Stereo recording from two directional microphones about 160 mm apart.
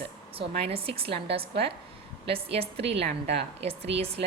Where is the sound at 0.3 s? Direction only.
35° right (ahead or behind).